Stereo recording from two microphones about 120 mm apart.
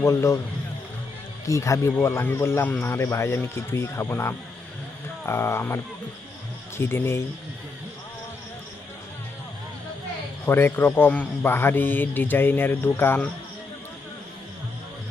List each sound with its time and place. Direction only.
0.0 s speech: 25° left (ahead or behind)
1.5 s speech: 25° left (ahead or behind)
10.4 s speech: 15° left (ahead or behind)